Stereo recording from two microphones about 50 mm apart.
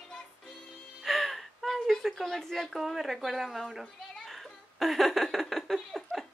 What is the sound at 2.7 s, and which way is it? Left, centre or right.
Children playing, centre.